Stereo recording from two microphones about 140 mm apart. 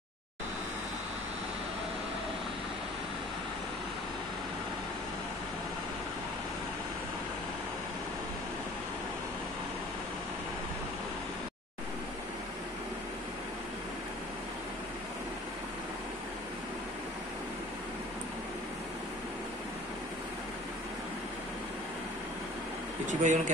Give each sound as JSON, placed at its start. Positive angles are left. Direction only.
{"t": 23.0, "sound": "speech", "side_deg": -65}